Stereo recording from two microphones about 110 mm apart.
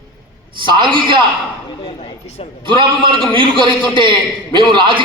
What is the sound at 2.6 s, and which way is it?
A man's voice, 50° right (ahead or behind).